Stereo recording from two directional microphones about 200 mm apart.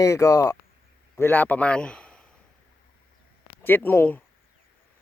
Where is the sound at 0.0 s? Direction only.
15° left (ahead or behind).